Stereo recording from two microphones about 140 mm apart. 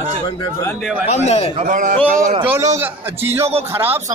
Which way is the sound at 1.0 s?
50° left (ahead or behind).